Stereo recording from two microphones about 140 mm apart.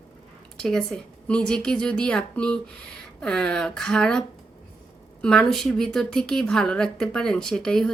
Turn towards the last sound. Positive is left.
turn(degrees=5)  # may be behind; listen again after turning